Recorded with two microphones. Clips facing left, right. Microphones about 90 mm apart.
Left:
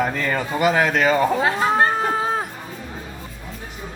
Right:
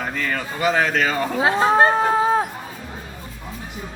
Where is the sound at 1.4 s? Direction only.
15° right (ahead or behind).